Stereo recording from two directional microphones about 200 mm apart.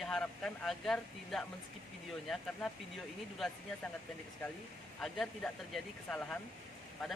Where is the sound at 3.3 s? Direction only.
Centre (ahead or behind).